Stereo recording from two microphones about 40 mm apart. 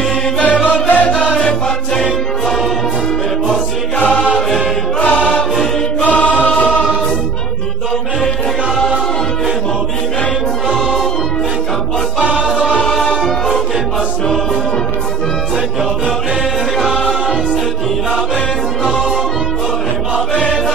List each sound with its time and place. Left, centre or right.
0.4 s music: left
4.0 s music: left
6.0 s choir: left
12.4 s music: centre
12.8 s music: centre